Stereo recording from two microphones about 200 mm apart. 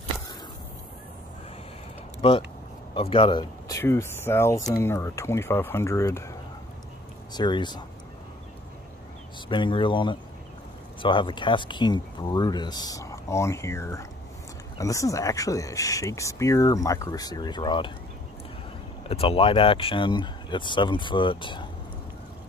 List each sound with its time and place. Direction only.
2.2 s speech: 25° left (ahead or behind)
7.3 s speech: 20° left (ahead or behind)
9.5 s speech: 25° left (ahead or behind)
19.0 s speech: 30° left (ahead or behind)